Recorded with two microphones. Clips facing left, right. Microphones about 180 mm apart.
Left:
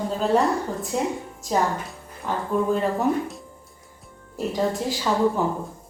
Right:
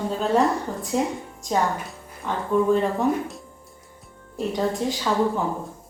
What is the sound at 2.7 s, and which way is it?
A woman's voice, centre (ahead or behind).